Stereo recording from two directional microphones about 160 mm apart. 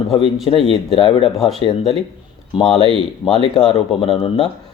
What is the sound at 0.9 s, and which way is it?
Speech, 35° left (ahead or behind).